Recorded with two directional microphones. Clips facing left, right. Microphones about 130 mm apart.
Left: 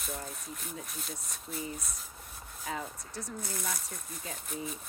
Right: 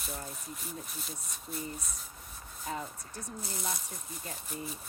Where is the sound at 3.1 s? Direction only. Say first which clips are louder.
Left 3 dB; 75° left (ahead or behind).